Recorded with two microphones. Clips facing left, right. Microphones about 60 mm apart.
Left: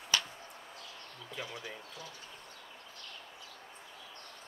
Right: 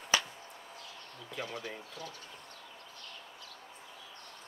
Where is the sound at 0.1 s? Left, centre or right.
Centre.